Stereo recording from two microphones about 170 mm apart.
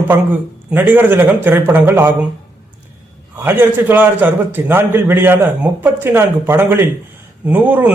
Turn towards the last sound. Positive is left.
turn(degrees=-10)  # may be behind; listen again after turning